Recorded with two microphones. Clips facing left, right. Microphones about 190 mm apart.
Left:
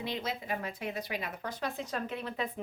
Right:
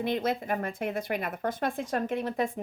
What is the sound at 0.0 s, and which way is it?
Speech, 50° right (ahead or behind).